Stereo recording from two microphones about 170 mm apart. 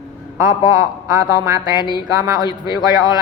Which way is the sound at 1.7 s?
25° left (ahead or behind).